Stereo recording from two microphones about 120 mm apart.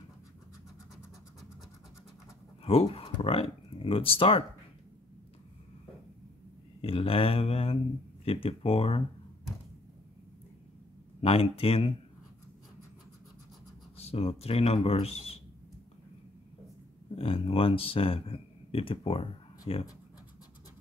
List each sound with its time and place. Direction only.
2.6 s speech: 55° left (ahead or behind)
6.8 s speech: 50° left (ahead or behind)
11.1 s speech: 55° left (ahead or behind)
13.9 s speech: 55° left (ahead or behind)
17.1 s speech: 50° left (ahead or behind)